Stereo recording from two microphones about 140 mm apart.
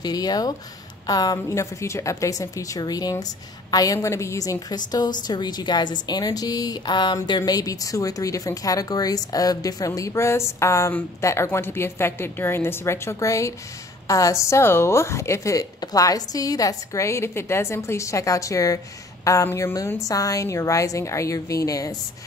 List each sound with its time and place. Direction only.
0.0 s a woman's voice: 25° left (ahead or behind)